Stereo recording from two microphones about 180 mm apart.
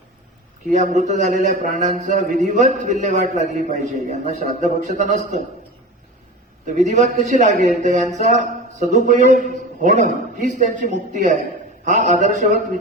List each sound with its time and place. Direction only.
0.7 s a man's voice: 45° right (ahead or behind)
6.7 s a man's voice: 45° right (ahead or behind)